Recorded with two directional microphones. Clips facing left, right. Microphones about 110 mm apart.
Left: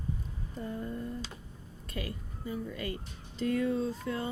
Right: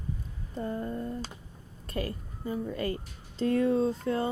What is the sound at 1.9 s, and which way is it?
A woman's voice, 40° right (ahead or behind).